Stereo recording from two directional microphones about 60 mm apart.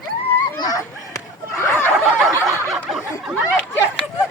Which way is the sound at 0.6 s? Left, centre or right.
Left.